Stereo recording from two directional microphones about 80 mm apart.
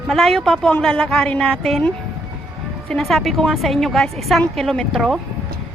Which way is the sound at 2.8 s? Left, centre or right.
Centre.